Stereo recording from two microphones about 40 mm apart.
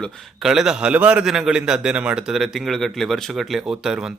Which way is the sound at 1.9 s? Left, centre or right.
Right.